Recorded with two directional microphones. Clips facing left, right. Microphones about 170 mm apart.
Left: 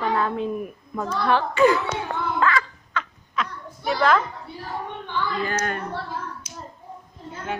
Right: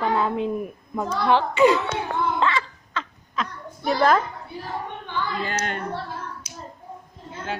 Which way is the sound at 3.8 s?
40° right (ahead or behind).